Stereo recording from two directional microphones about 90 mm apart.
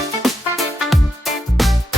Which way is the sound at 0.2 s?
Centre (ahead or behind).